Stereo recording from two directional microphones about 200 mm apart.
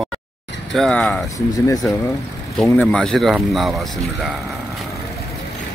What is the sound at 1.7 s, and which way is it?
Speech, 15° left (ahead or behind).